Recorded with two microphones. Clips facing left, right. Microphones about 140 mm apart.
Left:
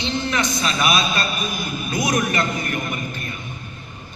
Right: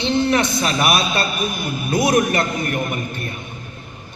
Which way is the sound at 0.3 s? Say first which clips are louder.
Right 4 dB; 55° right (ahead or behind).